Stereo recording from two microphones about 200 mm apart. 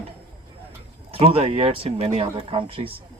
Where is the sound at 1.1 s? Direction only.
30° right (ahead or behind).